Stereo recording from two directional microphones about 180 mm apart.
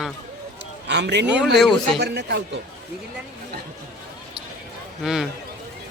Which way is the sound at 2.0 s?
70° right (ahead or behind).